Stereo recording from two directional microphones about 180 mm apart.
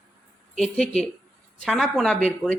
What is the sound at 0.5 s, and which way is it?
Speech, centre (ahead or behind).